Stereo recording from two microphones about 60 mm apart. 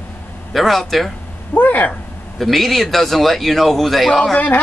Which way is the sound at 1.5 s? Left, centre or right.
Left.